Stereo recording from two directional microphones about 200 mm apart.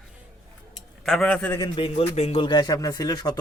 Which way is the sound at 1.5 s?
20° left (ahead or behind).